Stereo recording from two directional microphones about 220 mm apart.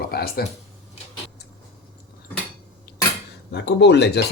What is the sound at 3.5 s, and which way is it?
Speech, 50° left (ahead or behind).